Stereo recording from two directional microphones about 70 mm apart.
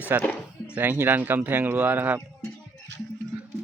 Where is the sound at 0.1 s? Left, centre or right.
Right.